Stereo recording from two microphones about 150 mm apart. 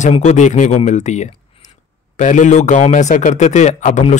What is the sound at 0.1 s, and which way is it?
Speech, 50° left (ahead or behind).